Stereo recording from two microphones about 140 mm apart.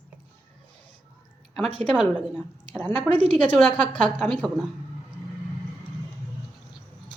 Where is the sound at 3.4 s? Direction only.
10° left (ahead or behind).